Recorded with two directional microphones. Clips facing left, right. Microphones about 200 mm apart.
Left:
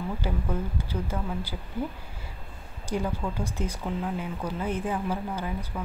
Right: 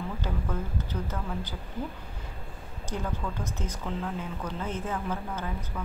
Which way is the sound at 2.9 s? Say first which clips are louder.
Left 4 dB; 10° left (ahead or behind).